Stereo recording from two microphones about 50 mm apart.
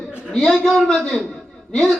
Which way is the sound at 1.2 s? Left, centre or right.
Centre.